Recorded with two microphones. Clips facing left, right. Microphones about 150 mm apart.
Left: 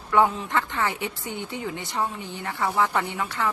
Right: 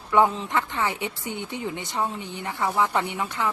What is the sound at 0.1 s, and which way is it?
Speech, 25° right (ahead or behind).